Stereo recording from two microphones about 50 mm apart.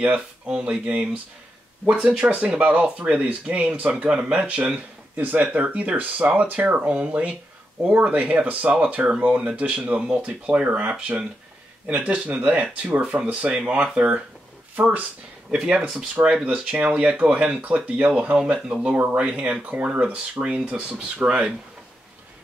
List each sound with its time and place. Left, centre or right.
0.5 s speech: centre
15.5 s speech: centre
16.8 s speech: right